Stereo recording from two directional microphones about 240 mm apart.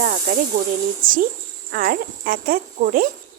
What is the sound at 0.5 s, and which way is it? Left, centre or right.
A woman's voice, right.